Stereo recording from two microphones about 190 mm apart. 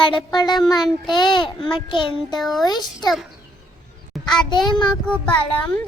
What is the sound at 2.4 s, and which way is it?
Speech, centre (ahead or behind).